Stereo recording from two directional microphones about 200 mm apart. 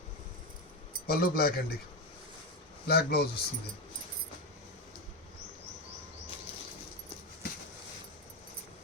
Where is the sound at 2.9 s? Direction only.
50° left (ahead or behind).